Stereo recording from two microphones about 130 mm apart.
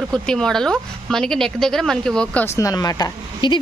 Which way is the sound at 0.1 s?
5° left (ahead or behind).